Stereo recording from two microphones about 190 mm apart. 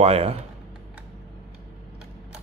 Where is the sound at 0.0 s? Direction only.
30° right (ahead or behind).